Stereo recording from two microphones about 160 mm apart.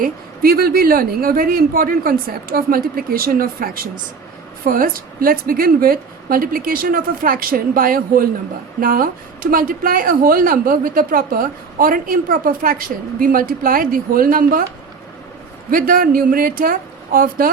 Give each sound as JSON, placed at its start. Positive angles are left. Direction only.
{"t": 0.0, "sound": "speech", "side_deg": -70}
{"t": 15.7, "sound": "speech", "side_deg": -65}